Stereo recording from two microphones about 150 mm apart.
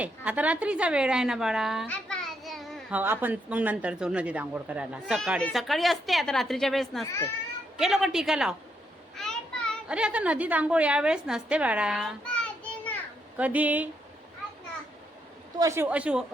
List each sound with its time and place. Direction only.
0.0 s speech: 10° right (ahead or behind)
1.9 s a sound: 5° left (ahead or behind)
2.9 s speech: 15° right (ahead or behind)
7.0 s speech: 20° left (ahead or behind)
7.8 s a woman's voice: centre (ahead or behind)
9.1 s child singing: 5° left (ahead or behind)
9.9 s a woman's voice: 10° right (ahead or behind); by 12.9 s 10° left (ahead or behind)
13.3 s speech: 10° right (ahead or behind)
15.5 s speech: 20° right (ahead or behind)